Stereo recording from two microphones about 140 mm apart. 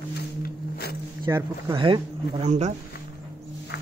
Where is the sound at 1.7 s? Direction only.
35° right (ahead or behind).